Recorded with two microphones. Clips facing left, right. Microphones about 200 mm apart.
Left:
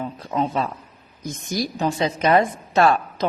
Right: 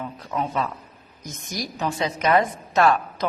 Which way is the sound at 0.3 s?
25° left (ahead or behind).